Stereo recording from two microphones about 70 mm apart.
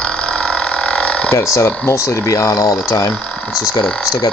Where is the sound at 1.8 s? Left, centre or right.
Left.